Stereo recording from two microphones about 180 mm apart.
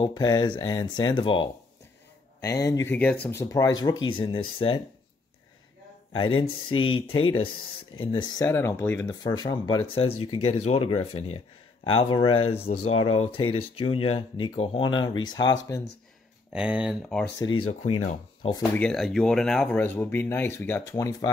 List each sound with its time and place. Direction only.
0.0 s speech: 20° left (ahead or behind)
6.1 s speech: 30° left (ahead or behind)
8.5 s speech: 15° left (ahead or behind)
16.5 s speech: 5° right (ahead or behind)
17.6 s speech: 35° left (ahead or behind)
18.7 s speech: 5° left (ahead or behind)